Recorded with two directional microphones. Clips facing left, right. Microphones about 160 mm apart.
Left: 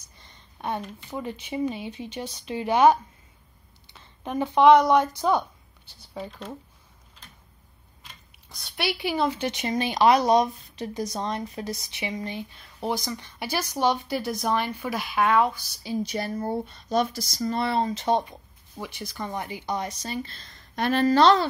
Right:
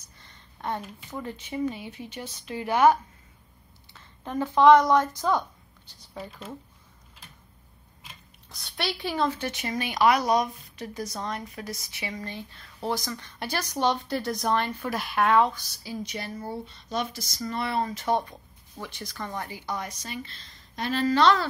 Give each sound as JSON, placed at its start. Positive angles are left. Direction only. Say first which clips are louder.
{"t": 0.3, "sound": "a sound", "louder": "left 1 dB", "side_deg": 15}
{"t": 1.1, "sound": "a woman's voice", "louder": "left 2 dB", "side_deg": 15}
{"t": 8.0, "sound": "speech", "louder": "right 1 dB", "side_deg": 0}
{"t": 15.8, "sound": "speech", "louder": "left 6 dB", "side_deg": 30}
{"t": 20.0, "sound": "speech", "louder": "left 5 dB", "side_deg": 35}
{"t": 20.7, "sound": "a woman's voice", "louder": "left 4 dB", "side_deg": 60}
{"t": 21.1, "sound": "speech", "louder": "left 3 dB", "side_deg": 35}